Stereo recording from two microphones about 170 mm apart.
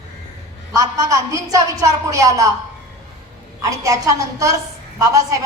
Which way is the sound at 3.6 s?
20° right (ahead or behind).